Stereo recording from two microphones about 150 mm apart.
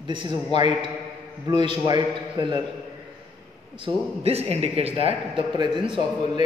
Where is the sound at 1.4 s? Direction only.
30° right (ahead or behind).